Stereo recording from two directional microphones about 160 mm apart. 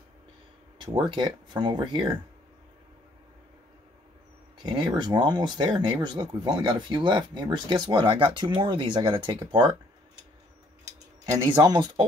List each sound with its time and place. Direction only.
1.0 s speech: 30° right (ahead or behind)
4.6 s speech: 30° right (ahead or behind)
11.2 s speech: 25° right (ahead or behind)